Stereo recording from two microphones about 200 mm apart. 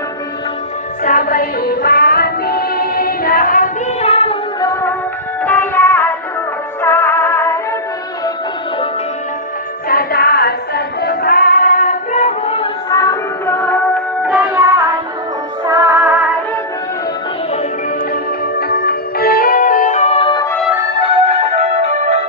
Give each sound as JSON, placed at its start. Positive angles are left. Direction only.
{"t": 1.0, "sound": "music", "side_deg": 45}
{"t": 4.1, "sound": "child singing", "side_deg": 30}
{"t": 5.4, "sound": "music", "side_deg": 10}
{"t": 9.8, "sound": "music", "side_deg": 50}
{"t": 12.9, "sound": "music", "side_deg": 15}
{"t": 14.2, "sound": "music", "side_deg": -10}
{"t": 18.6, "sound": "music", "side_deg": 50}
{"t": 20.7, "sound": "music", "side_deg": -15}
{"t": 21.9, "sound": "music", "side_deg": -35}